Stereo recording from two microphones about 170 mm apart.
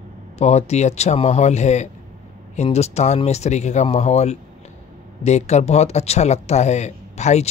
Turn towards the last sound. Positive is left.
turn(degrees=40)  # may be behind; listen again after turning